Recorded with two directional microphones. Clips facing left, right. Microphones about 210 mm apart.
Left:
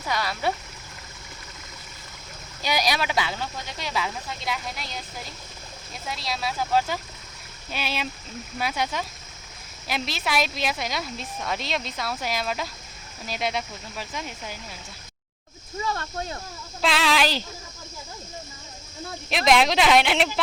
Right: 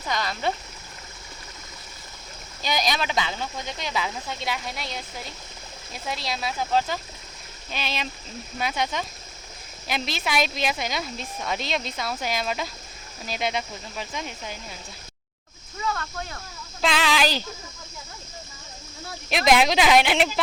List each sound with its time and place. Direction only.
0.0 s speech: 5° left (ahead or behind)
2.6 s a woman's voice: 10° left (ahead or behind)
6.1 s a woman's voice: centre (ahead or behind)
15.9 s speech: 30° left (ahead or behind)
16.8 s a sound: centre (ahead or behind)
19.3 s a woman's voice: centre (ahead or behind)